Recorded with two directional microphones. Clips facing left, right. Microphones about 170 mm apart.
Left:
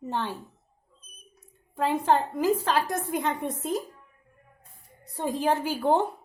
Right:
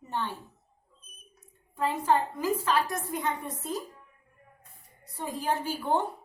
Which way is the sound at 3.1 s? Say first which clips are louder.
Left 4 dB; 90° left.